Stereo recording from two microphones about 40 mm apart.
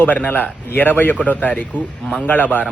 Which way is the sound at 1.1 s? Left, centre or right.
Left.